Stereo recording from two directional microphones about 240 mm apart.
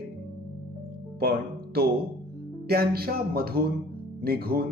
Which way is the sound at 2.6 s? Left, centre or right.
Right.